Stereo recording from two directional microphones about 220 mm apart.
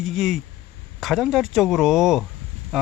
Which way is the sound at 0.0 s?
Centre (ahead or behind).